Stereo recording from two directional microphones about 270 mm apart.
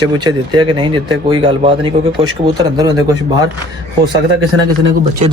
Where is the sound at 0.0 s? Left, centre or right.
Centre.